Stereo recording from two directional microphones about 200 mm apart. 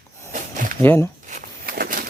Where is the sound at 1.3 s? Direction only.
45° right (ahead or behind).